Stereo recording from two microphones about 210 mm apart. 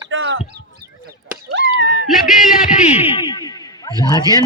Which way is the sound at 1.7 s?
60° right (ahead or behind).